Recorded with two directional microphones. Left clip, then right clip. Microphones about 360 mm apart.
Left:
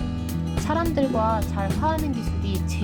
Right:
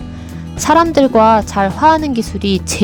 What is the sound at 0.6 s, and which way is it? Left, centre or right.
A woman's voice, right.